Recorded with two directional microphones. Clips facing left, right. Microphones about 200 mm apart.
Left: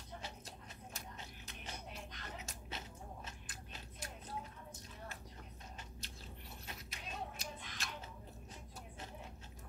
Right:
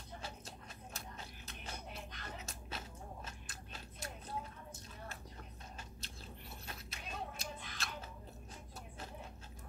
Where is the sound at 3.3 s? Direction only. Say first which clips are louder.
Right 1 dB; 15° left (ahead or behind).